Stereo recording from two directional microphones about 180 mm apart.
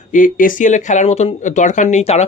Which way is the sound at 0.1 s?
50° left (ahead or behind).